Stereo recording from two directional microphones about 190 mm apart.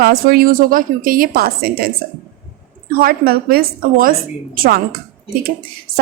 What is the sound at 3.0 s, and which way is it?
Speech, 50° right (ahead or behind).